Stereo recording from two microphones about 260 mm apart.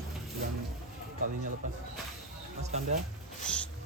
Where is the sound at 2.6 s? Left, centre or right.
Right.